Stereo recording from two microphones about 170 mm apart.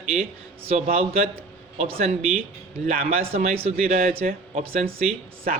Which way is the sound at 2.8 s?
60° right (ahead or behind).